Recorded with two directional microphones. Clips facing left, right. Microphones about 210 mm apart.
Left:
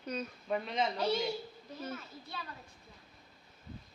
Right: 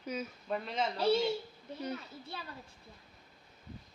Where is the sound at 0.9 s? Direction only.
30° right (ahead or behind).